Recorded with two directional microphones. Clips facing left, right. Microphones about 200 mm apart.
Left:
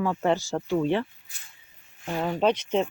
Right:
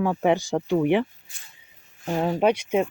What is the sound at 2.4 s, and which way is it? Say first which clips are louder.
Speech: right 1 dB; 10° right (ahead or behind).